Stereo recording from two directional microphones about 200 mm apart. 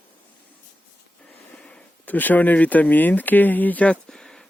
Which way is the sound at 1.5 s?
5° left (ahead or behind).